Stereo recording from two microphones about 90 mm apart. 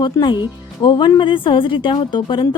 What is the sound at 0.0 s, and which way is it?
Speech, 60° left (ahead or behind).